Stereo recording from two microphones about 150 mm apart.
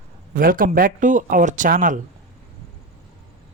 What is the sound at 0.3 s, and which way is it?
Speech, 70° right (ahead or behind).